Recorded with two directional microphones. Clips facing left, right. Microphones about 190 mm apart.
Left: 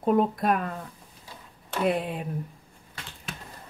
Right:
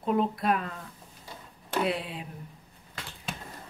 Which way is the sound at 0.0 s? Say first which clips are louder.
Left 4 dB; 45° left (ahead or behind).